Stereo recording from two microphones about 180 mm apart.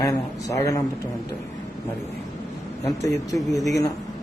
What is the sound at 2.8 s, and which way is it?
Speech, 20° left (ahead or behind).